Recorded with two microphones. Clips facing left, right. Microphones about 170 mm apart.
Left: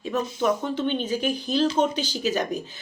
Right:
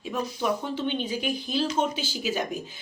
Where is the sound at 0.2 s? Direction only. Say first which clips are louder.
Left 1 dB; 25° left (ahead or behind).